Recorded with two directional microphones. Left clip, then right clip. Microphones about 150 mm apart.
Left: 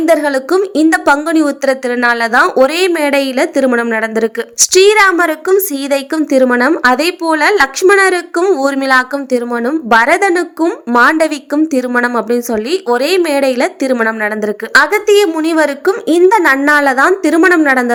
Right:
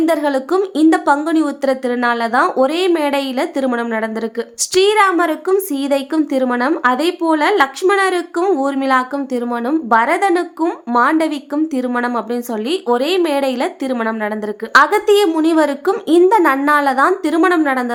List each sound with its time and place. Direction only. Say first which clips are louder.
0.0 s a woman's voice: left 5 dB; 15° left (ahead or behind)